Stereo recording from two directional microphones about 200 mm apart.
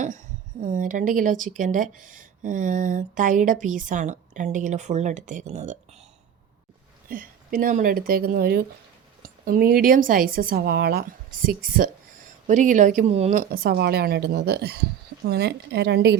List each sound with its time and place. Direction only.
0.6 s speech: 40° right (ahead or behind)
7.1 s a woman's voice: 45° right (ahead or behind)
13.5 s a woman's voice: 50° right (ahead or behind)